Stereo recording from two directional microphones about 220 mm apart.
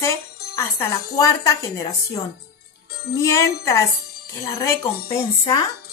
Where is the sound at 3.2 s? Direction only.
15° left (ahead or behind).